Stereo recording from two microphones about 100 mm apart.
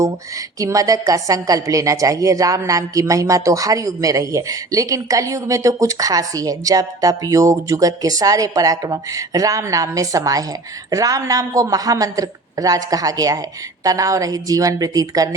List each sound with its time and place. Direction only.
0.6 s a woman's voice: 35° right (ahead or behind)